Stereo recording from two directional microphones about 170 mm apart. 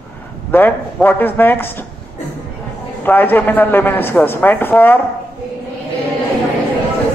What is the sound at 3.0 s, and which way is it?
Speech, 10° left (ahead or behind).